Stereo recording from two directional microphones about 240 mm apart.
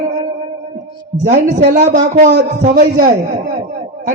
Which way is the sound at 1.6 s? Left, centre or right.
Right.